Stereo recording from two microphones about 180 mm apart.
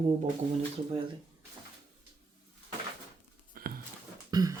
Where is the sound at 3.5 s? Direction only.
55° right (ahead or behind).